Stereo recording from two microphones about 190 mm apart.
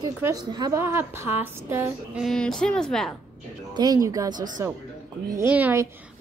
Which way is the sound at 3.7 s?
20° right (ahead or behind).